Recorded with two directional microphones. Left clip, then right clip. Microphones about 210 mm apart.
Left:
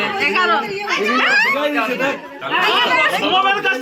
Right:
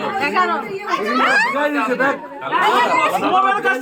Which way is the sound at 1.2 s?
5° left (ahead or behind).